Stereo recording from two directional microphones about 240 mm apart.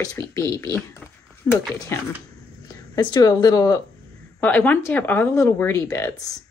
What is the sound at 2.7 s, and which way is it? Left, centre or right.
A woman's voice, centre.